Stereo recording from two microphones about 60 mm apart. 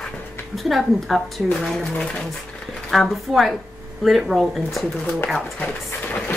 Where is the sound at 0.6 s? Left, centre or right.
Centre.